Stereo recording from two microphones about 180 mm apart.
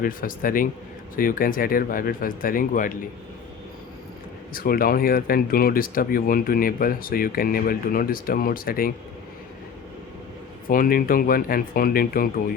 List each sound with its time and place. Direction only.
0.0 s speech: 50° left (ahead or behind)
4.5 s speech: 55° left (ahead or behind)
10.7 s speech: 55° left (ahead or behind)